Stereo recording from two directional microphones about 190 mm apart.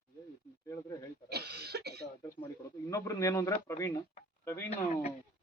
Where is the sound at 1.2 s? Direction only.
60° right (ahead or behind).